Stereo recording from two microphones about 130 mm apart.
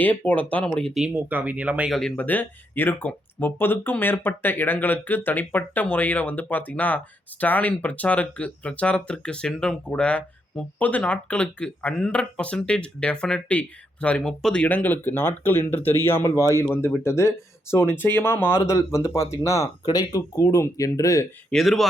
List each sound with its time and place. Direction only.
0.0 s speech: 10° left (ahead or behind)
1.0 s speech: 15° right (ahead or behind)
1.9 s speech: 5° left (ahead or behind); by 21.2 s 25° left (ahead or behind)
21.5 s speech: centre (ahead or behind)